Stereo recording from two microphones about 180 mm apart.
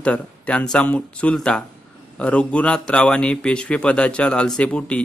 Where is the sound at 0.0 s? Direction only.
5° left (ahead or behind).